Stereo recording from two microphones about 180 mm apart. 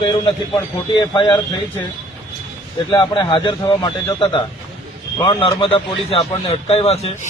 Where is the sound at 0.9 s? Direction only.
25° left (ahead or behind).